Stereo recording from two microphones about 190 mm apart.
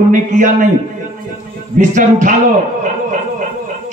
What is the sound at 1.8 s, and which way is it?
Speech, 40° right (ahead or behind).